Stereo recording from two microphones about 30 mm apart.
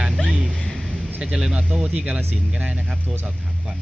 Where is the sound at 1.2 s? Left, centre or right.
Right.